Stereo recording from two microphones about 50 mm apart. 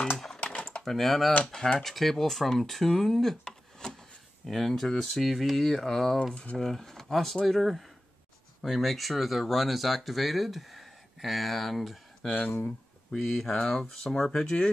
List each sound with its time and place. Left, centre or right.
0.4 s typing: left
0.8 s speech: centre
4.5 s speech: centre
6.3 s speech: left
6.6 s speech: centre
12.3 s speech: left
13.1 s speech: centre